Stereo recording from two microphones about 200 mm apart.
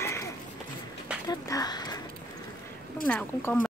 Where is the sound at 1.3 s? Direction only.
20° left (ahead or behind).